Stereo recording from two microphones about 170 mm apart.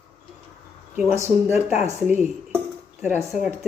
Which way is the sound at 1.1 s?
15° right (ahead or behind).